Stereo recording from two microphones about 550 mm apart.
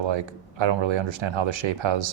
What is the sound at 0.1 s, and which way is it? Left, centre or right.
A man's voice, right.